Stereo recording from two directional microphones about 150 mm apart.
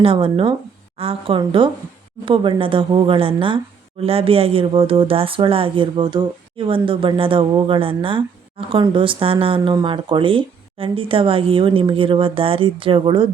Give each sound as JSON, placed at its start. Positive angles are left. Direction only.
{"t": 0.0, "sound": "speech", "side_deg": -40}